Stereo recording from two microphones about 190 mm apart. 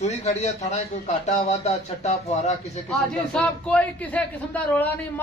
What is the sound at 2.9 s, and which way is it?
A man's voice, 5° left (ahead or behind).